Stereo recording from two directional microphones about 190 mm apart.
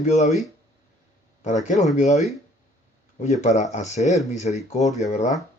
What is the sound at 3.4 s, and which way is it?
Speech, 35° left (ahead or behind).